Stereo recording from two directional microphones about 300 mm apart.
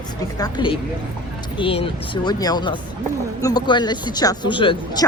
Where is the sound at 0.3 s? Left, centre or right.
Centre.